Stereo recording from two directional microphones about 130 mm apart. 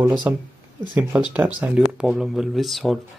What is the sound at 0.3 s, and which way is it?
Speech, 15° right (ahead or behind).